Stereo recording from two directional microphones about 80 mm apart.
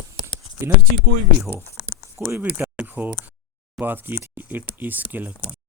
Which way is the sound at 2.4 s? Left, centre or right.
Centre.